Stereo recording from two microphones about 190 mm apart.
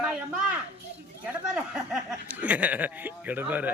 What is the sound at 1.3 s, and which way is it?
Speech, 5° right (ahead or behind).